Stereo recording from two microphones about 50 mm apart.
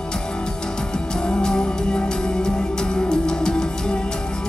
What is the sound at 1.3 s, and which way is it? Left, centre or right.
Music, centre.